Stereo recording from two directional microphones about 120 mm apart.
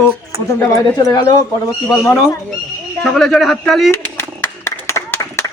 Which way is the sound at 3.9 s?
20° left (ahead or behind).